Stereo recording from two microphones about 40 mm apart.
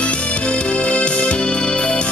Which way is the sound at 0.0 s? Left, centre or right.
Left.